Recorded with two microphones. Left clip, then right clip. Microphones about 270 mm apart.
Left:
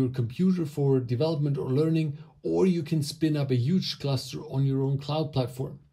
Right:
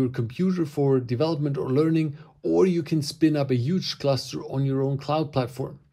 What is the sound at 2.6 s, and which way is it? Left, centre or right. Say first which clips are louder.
Speech: right 4 dB; centre.